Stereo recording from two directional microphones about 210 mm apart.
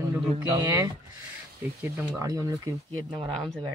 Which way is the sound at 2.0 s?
15° right (ahead or behind).